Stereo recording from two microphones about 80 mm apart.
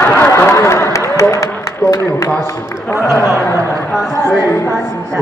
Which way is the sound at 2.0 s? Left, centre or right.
Left.